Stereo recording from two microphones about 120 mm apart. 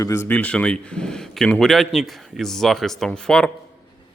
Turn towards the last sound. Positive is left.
turn(degrees=5)  # may be behind; listen again after turning